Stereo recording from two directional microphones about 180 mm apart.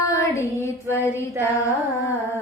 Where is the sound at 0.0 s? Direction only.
15° left (ahead or behind).